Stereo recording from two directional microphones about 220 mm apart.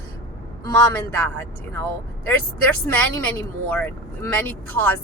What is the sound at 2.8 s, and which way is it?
Speech, 10° left (ahead or behind).